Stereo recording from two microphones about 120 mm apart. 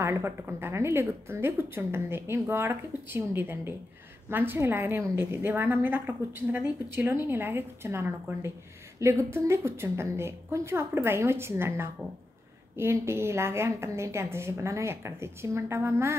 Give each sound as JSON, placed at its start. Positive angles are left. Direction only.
{"t": 0.0, "sound": "a woman's voice", "side_deg": -20}